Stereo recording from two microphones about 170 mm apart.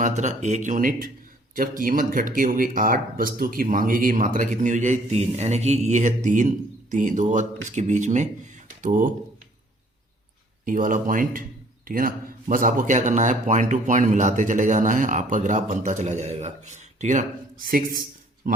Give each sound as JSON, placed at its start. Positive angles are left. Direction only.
{"t": 0.0, "sound": "speech", "side_deg": -45}
{"t": 10.7, "sound": "speech", "side_deg": -50}